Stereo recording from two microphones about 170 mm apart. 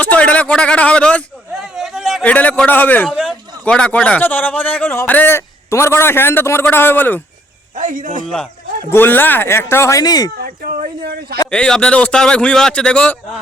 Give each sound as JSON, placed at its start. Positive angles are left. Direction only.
{"t": 0.0, "sound": "a man's voice", "side_deg": 10}
{"t": 7.8, "sound": "a man's voice", "side_deg": -50}
{"t": 8.9, "sound": "a man's voice", "side_deg": 10}
{"t": 10.3, "sound": "speech", "side_deg": -60}
{"t": 11.5, "sound": "speech", "side_deg": 5}